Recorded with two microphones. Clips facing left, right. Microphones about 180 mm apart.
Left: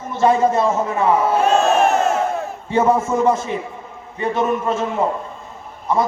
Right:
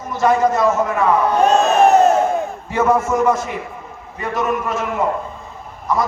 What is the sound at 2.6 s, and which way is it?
A man's voice, 30° left (ahead or behind).